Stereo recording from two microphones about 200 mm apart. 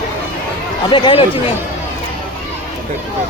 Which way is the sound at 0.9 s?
25° left (ahead or behind).